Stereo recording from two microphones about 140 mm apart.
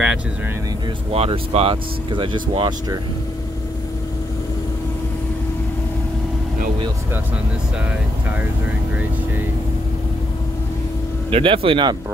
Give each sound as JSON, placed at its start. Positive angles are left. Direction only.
{"t": 1.1, "sound": "speech", "side_deg": -45}
{"t": 11.2, "sound": "speech", "side_deg": -40}